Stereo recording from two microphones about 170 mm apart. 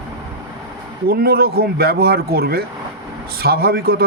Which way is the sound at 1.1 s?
65° right (ahead or behind).